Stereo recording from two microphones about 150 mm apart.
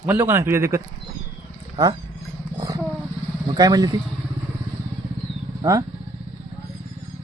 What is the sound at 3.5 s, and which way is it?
Speech, 25° right (ahead or behind).